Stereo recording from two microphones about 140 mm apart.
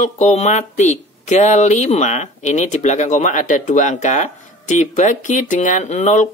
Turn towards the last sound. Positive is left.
turn(degrees=55)  # may be behind; listen again after turning